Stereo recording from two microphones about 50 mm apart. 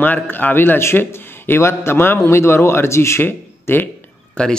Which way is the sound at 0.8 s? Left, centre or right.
Left.